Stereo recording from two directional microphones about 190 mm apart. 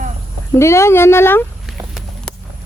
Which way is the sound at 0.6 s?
15° left (ahead or behind).